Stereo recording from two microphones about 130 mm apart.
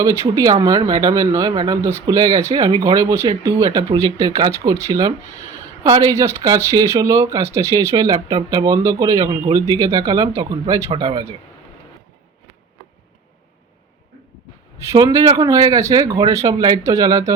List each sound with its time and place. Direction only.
0.0 s speech: 25° right (ahead or behind)
14.8 s speech: 25° right (ahead or behind)